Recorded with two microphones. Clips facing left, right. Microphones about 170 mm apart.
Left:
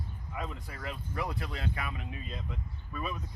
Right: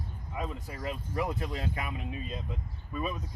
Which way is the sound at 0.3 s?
15° right (ahead or behind).